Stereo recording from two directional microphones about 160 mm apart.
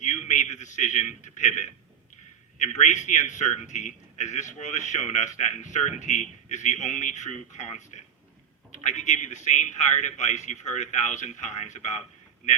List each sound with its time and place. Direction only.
0.0 s a man's voice: 50° left (ahead or behind)